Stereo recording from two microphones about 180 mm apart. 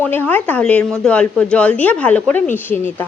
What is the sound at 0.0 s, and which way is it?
Speech, 10° left (ahead or behind).